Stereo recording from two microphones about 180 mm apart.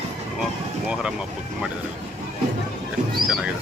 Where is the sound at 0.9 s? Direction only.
5° right (ahead or behind).